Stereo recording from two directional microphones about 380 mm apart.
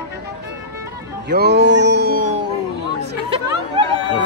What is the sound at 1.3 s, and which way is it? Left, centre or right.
Mantra, right.